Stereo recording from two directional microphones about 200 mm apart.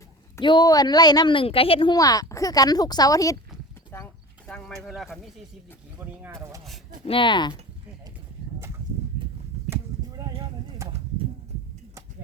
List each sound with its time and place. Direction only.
0.3 s a woman's voice: 20° left (ahead or behind)
3.9 s a sound: 10° left (ahead or behind)
6.0 s speech: 10° right (ahead or behind)
7.0 s a woman's voice: 25° left (ahead or behind)
9.6 s a sound: 20° right (ahead or behind)
10.8 s bird: 15° right (ahead or behind)